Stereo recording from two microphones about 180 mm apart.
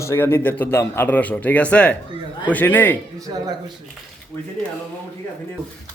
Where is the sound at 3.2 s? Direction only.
20° right (ahead or behind).